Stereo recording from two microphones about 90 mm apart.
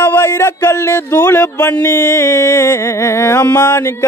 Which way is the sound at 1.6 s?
35° left (ahead or behind).